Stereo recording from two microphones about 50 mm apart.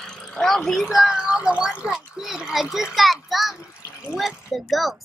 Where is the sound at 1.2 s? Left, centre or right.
Centre.